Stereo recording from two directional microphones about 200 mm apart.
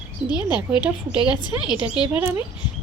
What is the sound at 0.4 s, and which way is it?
Speech, 5° right (ahead or behind).